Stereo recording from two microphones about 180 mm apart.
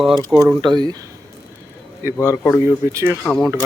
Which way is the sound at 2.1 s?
15° left (ahead or behind).